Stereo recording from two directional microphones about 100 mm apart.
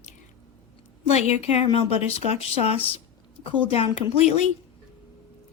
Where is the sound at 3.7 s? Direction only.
85° left.